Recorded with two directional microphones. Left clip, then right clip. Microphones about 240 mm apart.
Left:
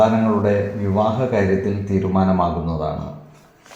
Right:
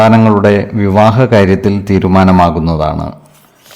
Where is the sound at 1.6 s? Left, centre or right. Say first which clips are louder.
Right 10 dB; right.